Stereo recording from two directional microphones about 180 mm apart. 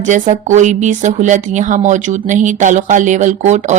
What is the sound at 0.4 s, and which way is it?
Speech, 40° right (ahead or behind).